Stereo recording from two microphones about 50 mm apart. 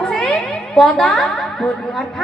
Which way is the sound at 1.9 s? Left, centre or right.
Centre.